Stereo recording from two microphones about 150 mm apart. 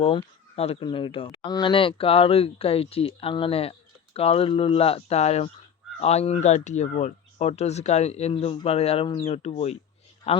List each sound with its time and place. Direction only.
0.0 s speech: 40° left (ahead or behind)